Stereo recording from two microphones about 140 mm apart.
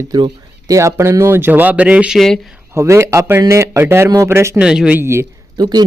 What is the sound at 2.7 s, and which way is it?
Speech, 20° right (ahead or behind).